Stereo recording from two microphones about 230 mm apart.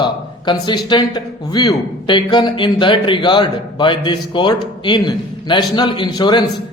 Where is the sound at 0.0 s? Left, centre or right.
Centre.